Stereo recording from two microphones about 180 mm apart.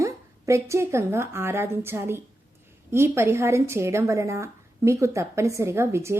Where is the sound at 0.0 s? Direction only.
15° right (ahead or behind).